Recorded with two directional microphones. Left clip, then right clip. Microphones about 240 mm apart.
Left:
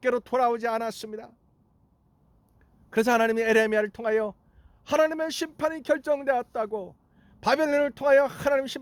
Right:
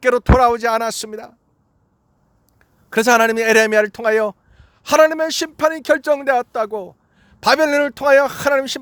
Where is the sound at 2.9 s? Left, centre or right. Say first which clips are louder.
Right 9 dB; centre.